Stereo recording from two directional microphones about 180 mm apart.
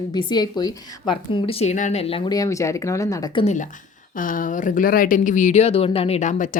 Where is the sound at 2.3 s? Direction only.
20° left (ahead or behind).